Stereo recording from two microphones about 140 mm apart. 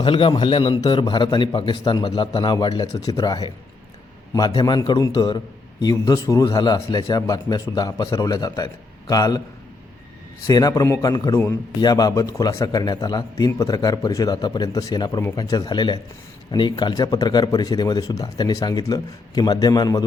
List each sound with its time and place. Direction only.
0.0 s a man's voice: 35° left (ahead or behind)
10.4 s speech: 25° left (ahead or behind)